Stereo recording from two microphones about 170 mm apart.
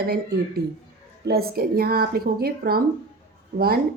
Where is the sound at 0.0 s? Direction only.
70° right (ahead or behind).